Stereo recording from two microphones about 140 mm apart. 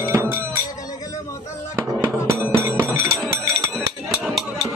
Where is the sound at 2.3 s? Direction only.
20° right (ahead or behind).